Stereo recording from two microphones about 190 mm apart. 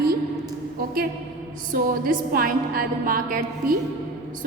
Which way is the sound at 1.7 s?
50° right (ahead or behind).